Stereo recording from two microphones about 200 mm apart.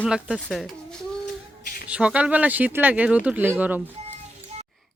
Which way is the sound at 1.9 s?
5° right (ahead or behind).